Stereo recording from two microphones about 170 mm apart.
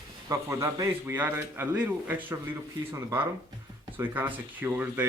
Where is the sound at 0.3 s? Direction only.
15° right (ahead or behind).